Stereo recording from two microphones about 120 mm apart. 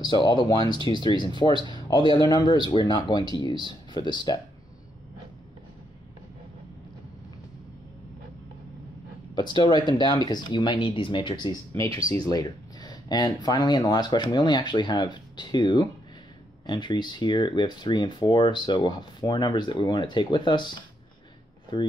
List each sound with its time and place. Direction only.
0.0 s speech: 40° left (ahead or behind)
9.3 s speech: 40° left (ahead or behind)
12.0 s speech: 30° left (ahead or behind)